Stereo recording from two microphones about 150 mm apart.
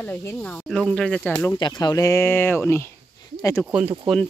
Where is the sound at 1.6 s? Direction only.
30° left (ahead or behind).